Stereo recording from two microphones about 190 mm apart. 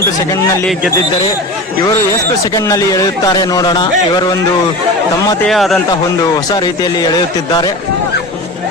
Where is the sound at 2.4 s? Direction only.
15° left (ahead or behind).